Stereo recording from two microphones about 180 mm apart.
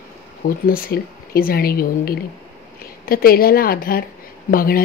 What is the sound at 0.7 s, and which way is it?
A woman's voice, 55° left (ahead or behind).